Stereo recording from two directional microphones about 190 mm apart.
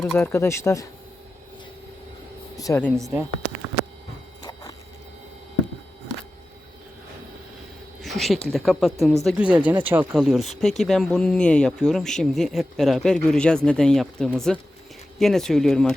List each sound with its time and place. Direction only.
0.0 s speech: 5° left (ahead or behind)
2.6 s speech: 15° left (ahead or behind)
8.0 s a sound: centre (ahead or behind)
8.5 s speech: centre (ahead or behind)